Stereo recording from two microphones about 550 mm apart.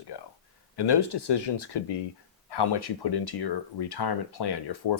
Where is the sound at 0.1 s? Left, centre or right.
Left.